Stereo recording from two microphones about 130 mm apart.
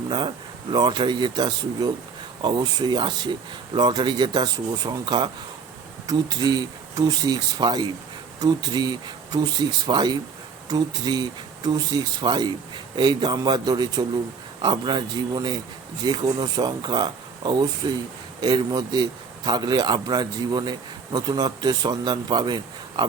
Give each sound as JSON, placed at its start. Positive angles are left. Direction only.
{"t": 0.1, "sound": "speech", "side_deg": -35}